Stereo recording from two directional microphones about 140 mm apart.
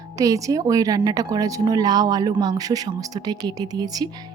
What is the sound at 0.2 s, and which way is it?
Speech, 25° right (ahead or behind).